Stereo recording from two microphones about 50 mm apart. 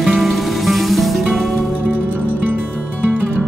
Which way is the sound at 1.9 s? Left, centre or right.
Right.